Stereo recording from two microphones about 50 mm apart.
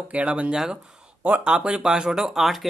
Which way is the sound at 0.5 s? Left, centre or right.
Centre.